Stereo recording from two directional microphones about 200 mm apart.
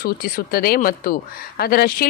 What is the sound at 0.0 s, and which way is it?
A woman's voice, 50° left (ahead or behind).